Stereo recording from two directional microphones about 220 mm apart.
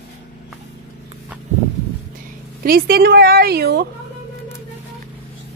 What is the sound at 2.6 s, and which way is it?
A woman's voice, 45° right (ahead or behind).